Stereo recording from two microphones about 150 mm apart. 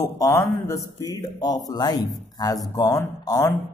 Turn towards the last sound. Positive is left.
turn(degrees=20)  # may be behind; listen again after turning